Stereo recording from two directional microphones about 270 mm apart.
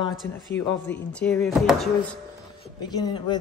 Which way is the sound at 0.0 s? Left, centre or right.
Centre.